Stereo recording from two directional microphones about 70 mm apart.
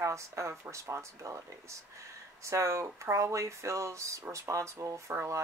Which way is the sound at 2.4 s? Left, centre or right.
Right.